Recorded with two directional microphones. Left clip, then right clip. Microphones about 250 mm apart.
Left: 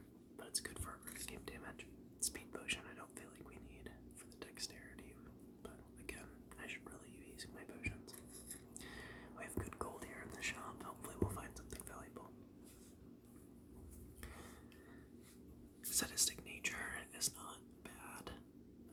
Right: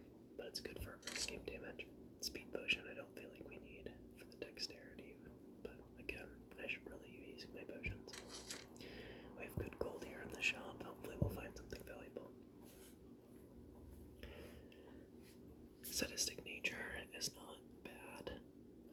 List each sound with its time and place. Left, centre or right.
0.3 s whispering: centre
1.3 s speech: centre
4.4 s whispering: centre
6.1 s whispering: centre
15.9 s whispering: centre